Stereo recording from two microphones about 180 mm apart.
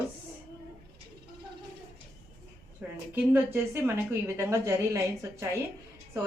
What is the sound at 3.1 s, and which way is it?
Speech, 10° right (ahead or behind).